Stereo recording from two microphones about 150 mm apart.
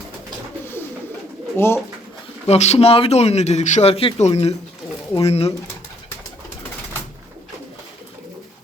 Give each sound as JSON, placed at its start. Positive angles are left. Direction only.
{"t": 0.6, "sound": "bird", "side_deg": 15}
{"t": 1.5, "sound": "speech", "side_deg": 15}
{"t": 2.5, "sound": "speech", "side_deg": 45}